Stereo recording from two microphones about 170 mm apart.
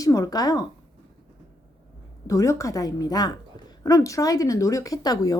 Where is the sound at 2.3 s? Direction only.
20° left (ahead or behind).